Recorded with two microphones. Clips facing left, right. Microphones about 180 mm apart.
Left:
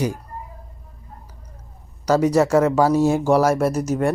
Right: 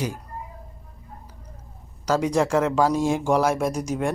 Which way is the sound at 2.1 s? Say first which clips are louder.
Left 5 dB; 10° left (ahead or behind).